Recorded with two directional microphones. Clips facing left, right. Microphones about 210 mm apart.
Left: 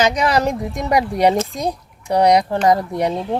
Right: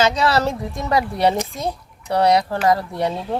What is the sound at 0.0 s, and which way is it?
A child's voice, 15° left (ahead or behind).